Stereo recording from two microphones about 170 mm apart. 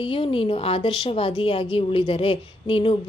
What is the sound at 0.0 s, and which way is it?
A woman's voice, 30° left (ahead or behind).